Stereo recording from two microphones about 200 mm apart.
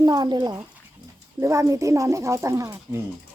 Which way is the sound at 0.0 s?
20° right (ahead or behind).